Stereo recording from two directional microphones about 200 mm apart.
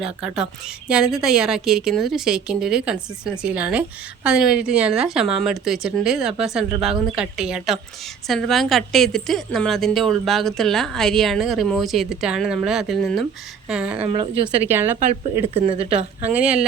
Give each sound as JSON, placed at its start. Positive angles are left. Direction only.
{"t": 0.0, "sound": "a woman's voice", "side_deg": -5}
{"t": 14.0, "sound": "a woman's voice", "side_deg": -30}
{"t": 14.7, "sound": "a woman's voice", "side_deg": -10}
{"t": 15.5, "sound": "a woman's voice", "side_deg": -30}
{"t": 16.3, "sound": "a woman's voice", "side_deg": -5}